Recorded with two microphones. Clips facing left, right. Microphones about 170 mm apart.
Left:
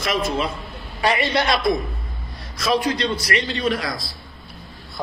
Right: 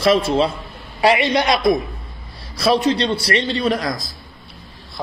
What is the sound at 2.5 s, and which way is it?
A man's voice, 30° right (ahead or behind).